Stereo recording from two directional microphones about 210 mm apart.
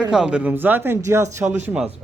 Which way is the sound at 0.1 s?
5° right (ahead or behind).